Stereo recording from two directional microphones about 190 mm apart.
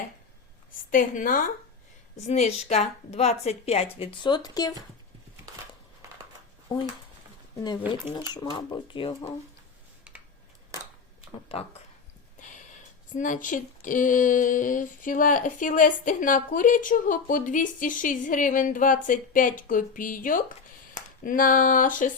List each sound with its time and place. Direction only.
0.9 s a woman's voice: 45° left (ahead or behind); by 4.7 s 20° left (ahead or behind)
7.6 s speech: 25° left (ahead or behind)
13.1 s speech: 45° left (ahead or behind)